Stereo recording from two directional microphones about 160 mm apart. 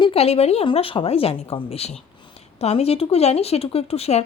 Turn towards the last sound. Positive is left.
turn(degrees=40)  # may be behind; listen again after turning